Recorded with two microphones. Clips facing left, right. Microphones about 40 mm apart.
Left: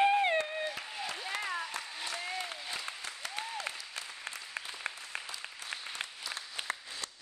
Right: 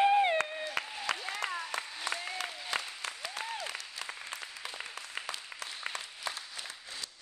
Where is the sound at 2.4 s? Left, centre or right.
Right.